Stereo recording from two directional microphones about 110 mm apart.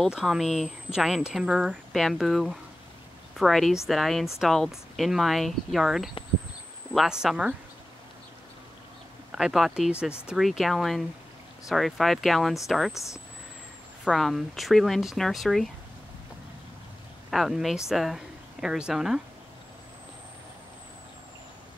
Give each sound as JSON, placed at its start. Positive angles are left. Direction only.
{"t": 0.0, "sound": "speech", "side_deg": -5}
{"t": 9.3, "sound": "speech", "side_deg": -5}
{"t": 12.9, "sound": "speech", "side_deg": 30}
{"t": 14.1, "sound": "speech", "side_deg": 0}
{"t": 17.3, "sound": "speech", "side_deg": 0}